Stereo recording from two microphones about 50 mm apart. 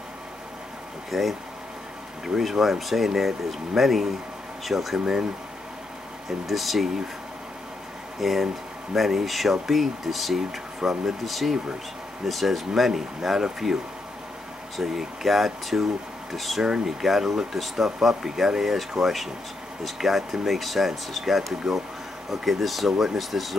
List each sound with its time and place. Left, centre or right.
1.1 s speech: centre
4.9 s speech: centre
6.4 s speech: centre
8.2 s speech: centre
11.2 s speech: centre
14.8 s speech: centre